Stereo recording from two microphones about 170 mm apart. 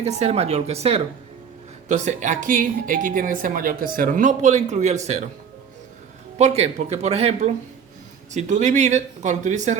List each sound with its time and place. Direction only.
0.0 s speech: 40° right (ahead or behind)
6.4 s speech: 40° right (ahead or behind)